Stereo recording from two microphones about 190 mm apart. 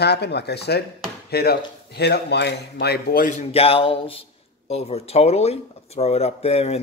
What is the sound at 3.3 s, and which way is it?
A man's voice, 30° left (ahead or behind).